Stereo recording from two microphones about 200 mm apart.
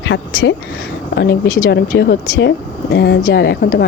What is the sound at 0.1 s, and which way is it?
Speech, 65° left (ahead or behind).